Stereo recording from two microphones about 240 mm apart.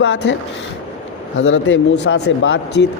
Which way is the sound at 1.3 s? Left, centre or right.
Left.